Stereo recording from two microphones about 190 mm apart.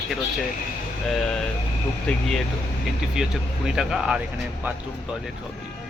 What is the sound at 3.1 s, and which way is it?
Speech, 5° right (ahead or behind).